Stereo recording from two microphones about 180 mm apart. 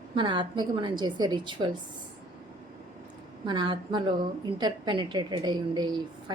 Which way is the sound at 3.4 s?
25° right (ahead or behind).